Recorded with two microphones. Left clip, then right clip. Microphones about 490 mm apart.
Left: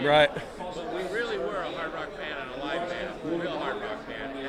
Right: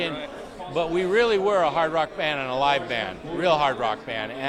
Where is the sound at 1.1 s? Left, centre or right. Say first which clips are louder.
Right 12 dB; right.